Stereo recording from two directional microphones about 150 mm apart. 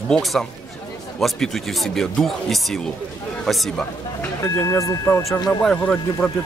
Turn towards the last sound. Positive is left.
turn(degrees=10)  # may be behind; listen again after turning